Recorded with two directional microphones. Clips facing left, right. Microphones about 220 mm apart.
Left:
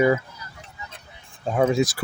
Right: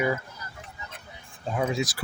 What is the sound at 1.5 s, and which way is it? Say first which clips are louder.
Speech: left 7 dB; 45° left (ahead or behind).